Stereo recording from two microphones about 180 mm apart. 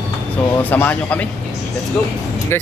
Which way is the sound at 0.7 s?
10° left (ahead or behind).